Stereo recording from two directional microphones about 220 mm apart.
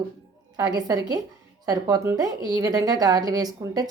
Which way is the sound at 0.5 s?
20° right (ahead or behind).